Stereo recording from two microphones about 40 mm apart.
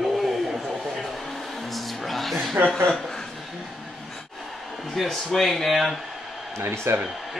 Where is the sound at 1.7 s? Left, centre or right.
Centre.